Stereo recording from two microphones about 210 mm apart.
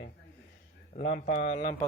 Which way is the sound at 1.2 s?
45° left (ahead or behind).